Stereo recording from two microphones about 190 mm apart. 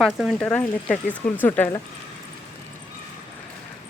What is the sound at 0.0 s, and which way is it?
Speech, centre (ahead or behind).